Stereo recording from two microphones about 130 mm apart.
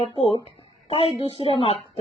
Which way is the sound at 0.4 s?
50° left (ahead or behind).